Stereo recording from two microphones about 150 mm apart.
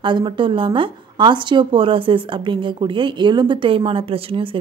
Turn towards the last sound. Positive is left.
turn(degrees=-40)  # may be behind; listen again after turning